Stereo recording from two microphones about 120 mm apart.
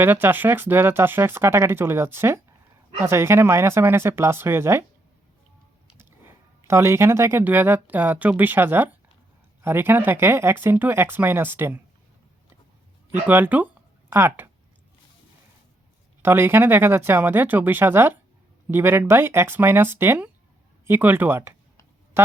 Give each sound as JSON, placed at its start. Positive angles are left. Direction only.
{"t": 0.0, "sound": "speech", "side_deg": -15}
{"t": 6.0, "sound": "speech", "side_deg": -20}
{"t": 13.1, "sound": "speech", "side_deg": -15}
{"t": 16.2, "sound": "speech", "side_deg": -20}